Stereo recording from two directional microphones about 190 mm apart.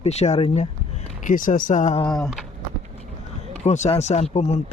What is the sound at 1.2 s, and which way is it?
Speech, 45° left (ahead or behind).